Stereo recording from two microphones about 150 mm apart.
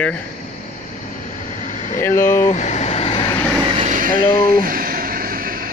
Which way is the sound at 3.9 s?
70° right (ahead or behind).